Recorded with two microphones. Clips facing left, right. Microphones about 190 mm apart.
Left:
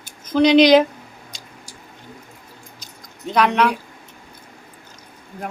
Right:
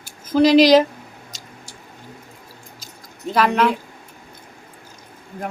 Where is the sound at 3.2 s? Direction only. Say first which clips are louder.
Even; 5° right (ahead or behind).